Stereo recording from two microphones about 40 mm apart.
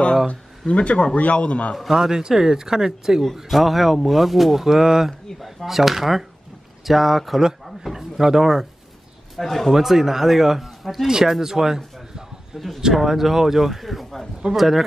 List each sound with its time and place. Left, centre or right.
0.3 s speech: left
1.8 s speech: centre
7.6 s a sound: centre
9.4 s speech: centre
9.7 s speech: centre
12.5 s speech: centre
12.9 s speech: centre